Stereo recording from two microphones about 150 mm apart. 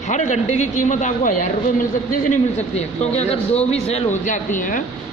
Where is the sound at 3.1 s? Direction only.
45° left (ahead or behind).